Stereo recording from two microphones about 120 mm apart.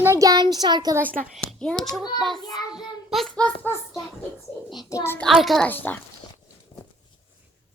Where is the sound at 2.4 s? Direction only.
35° left (ahead or behind).